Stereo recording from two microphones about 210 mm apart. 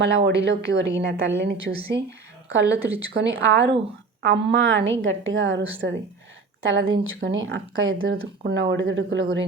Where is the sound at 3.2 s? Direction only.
60° right (ahead or behind).